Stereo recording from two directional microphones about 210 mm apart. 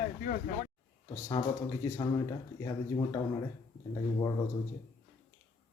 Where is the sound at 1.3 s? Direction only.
15° left (ahead or behind).